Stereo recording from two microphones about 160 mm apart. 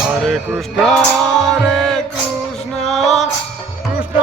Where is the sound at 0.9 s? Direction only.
Centre (ahead or behind).